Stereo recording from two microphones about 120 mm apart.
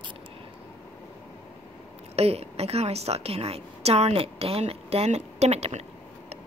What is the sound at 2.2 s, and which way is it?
A woman's voice, 60° right (ahead or behind).